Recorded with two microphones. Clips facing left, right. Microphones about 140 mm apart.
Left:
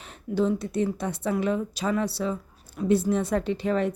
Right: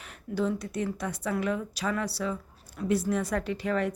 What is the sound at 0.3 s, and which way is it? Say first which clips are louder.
A woman's voice: left 5 dB; 25° left (ahead or behind).